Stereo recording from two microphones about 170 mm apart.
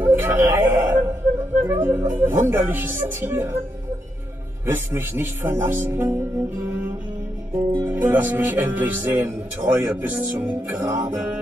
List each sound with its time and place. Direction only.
0.0 s a sound: 15° right (ahead or behind)
1.6 s music: 15° right (ahead or behind)
4.6 s music: 15° right (ahead or behind)